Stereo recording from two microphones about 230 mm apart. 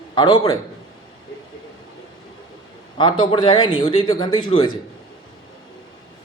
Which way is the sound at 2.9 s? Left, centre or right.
Left.